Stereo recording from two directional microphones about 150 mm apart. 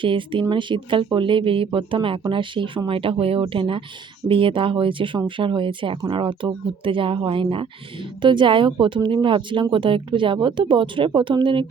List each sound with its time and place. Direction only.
0.0 s speech: 35° right (ahead or behind)